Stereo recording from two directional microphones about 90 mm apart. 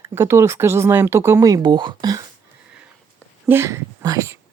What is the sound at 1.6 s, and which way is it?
Speech, 55° right (ahead or behind).